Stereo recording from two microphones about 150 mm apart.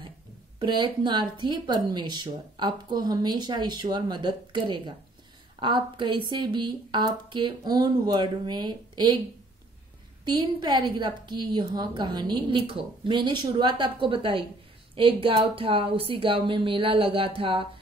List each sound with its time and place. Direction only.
0.6 s speech: 30° right (ahead or behind)
10.2 s a woman's voice: 30° right (ahead or behind)